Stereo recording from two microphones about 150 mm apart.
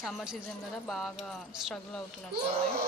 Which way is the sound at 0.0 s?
Centre (ahead or behind).